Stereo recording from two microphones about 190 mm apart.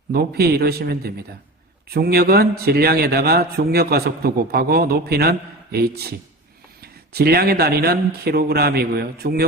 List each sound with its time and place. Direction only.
0.1 s a man's voice: 55° right (ahead or behind)